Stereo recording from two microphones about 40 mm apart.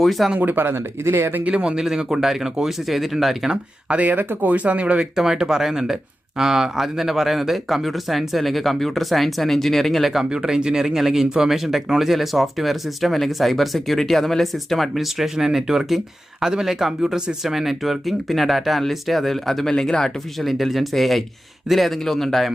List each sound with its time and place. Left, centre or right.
0.0 s speech: centre
0.3 s speech: right
1.5 s speech: right
1.7 s speech: centre
3.9 s speech: right
5.1 s speech: centre
10.2 s speech: centre